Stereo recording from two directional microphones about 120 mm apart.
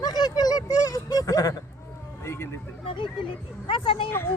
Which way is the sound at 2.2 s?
20° left (ahead or behind).